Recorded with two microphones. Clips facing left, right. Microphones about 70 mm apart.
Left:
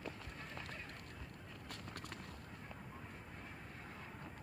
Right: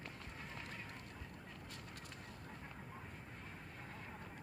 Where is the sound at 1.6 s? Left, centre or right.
Left.